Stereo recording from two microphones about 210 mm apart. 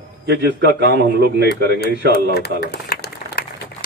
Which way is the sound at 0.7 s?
50° right (ahead or behind).